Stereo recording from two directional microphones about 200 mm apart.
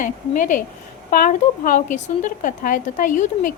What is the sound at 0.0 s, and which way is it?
Speech, 40° left (ahead or behind).